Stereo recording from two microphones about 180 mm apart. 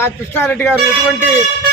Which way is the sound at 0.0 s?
10° left (ahead or behind).